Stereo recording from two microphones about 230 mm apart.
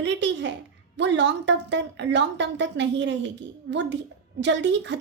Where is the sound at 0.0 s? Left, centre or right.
Right.